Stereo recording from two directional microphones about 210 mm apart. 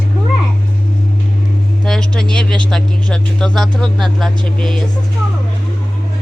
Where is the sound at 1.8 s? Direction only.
Centre (ahead or behind).